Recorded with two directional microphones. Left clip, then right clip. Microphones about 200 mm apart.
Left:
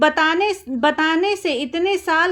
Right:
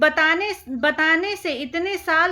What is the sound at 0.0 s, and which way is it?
A woman's voice, 25° left (ahead or behind).